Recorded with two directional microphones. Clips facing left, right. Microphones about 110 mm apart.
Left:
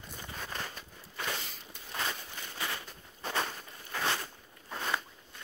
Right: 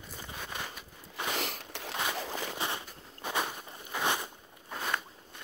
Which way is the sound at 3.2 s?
10° right (ahead or behind).